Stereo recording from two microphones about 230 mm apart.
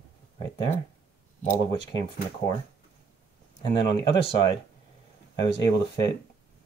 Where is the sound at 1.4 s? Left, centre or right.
Centre.